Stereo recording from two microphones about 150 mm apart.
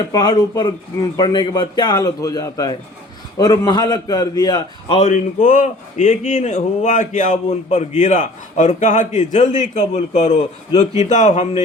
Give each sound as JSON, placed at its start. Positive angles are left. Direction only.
{"t": 0.1, "sound": "a man's voice", "side_deg": 25}
{"t": 4.9, "sound": "a man's voice", "side_deg": 50}